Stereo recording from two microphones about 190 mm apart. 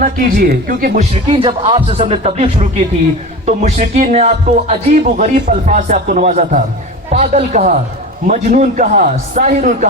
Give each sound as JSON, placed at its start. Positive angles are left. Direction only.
{"t": 0.0, "sound": "a man's voice", "side_deg": -45}
{"t": 1.1, "sound": "a man's voice", "side_deg": -30}